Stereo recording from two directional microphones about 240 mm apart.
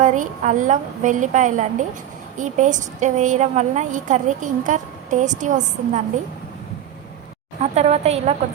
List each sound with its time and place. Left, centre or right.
0.0 s a woman's voice: right
7.6 s a woman's voice: right